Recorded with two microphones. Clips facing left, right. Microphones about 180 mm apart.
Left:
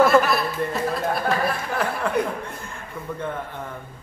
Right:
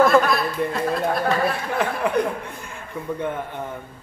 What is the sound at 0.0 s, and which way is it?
Speech, 5° left (ahead or behind).